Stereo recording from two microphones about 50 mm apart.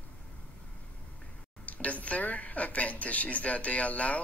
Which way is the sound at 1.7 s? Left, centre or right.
Left.